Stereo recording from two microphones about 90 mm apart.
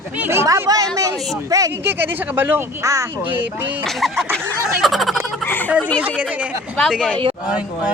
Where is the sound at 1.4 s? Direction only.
40° right (ahead or behind).